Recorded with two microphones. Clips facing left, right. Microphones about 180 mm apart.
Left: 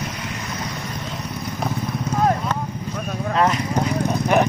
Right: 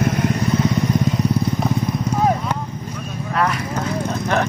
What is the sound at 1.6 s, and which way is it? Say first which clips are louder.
Horse: right 5 dB; centre (ahead or behind).